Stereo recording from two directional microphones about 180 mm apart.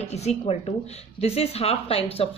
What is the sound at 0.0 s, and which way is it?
Speech, 35° left (ahead or behind).